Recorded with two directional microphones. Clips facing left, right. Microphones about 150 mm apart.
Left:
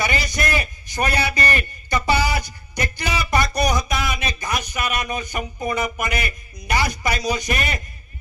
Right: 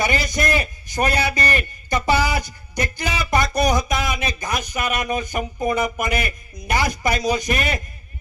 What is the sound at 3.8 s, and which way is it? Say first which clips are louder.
A man's voice: right 2 dB; 45° right (ahead or behind).